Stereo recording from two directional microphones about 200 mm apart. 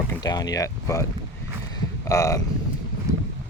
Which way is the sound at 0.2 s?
20° left (ahead or behind).